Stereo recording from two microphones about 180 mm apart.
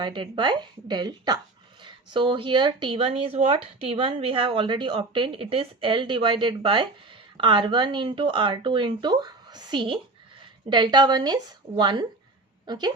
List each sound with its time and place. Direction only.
0.0 s a woman's voice: 25° right (ahead or behind)